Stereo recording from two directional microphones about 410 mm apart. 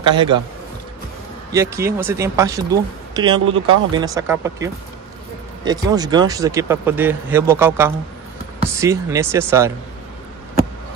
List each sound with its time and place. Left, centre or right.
0.1 s speech: centre
1.5 s speech: centre
5.7 s speech: centre